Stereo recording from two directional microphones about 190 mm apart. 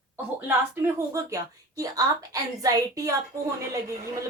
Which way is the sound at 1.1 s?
15° right (ahead or behind).